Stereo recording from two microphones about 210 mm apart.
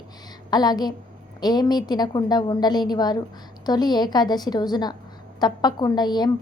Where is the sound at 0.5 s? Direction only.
20° left (ahead or behind).